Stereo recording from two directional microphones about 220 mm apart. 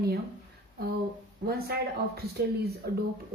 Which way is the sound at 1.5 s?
45° right (ahead or behind).